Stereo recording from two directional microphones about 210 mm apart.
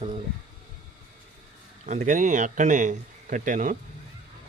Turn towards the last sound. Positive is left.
turn(degrees=-40)  # may be behind; listen again after turning